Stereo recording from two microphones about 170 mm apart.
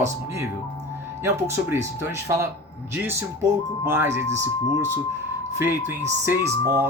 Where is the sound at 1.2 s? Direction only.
15° right (ahead or behind).